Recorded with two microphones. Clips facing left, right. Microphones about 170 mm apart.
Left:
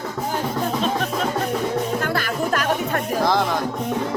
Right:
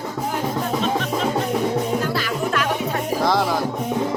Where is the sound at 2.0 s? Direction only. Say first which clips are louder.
Even; 55° left (ahead or behind).